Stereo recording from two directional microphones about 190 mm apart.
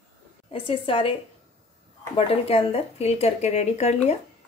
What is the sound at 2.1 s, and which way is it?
A woman's voice, 30° left (ahead or behind).